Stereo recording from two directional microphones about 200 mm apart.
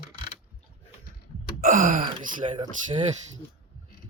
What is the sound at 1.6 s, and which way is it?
Gasp, 40° right (ahead or behind).